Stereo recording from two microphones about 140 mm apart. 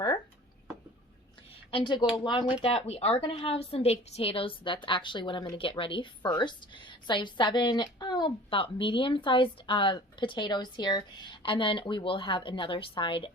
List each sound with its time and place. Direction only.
1.7 s a woman's voice: 35° left (ahead or behind)
2.8 s a woman's voice: 45° left (ahead or behind)